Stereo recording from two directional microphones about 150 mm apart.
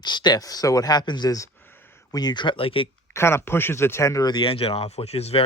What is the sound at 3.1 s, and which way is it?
Speech, 15° left (ahead or behind).